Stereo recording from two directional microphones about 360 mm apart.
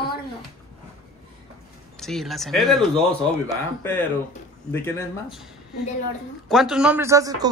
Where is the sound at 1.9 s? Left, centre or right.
Centre.